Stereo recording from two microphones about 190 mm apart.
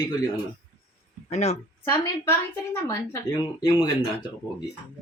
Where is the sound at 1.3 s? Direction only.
35° left (ahead or behind).